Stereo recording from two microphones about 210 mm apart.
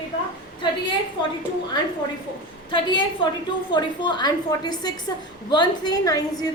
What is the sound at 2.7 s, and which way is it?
A woman's voice, 25° left (ahead or behind).